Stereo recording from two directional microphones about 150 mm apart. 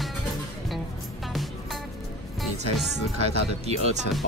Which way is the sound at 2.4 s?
Centre (ahead or behind).